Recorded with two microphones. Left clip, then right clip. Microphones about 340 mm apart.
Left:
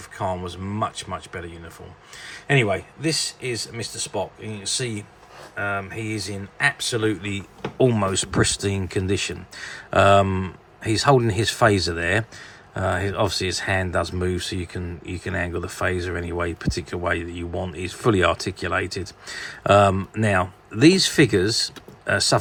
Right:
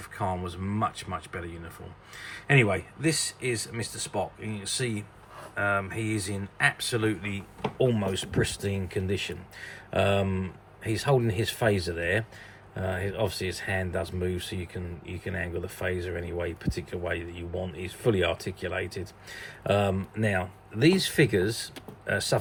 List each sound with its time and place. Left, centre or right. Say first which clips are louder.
0.2 s speech: left 5 dB; centre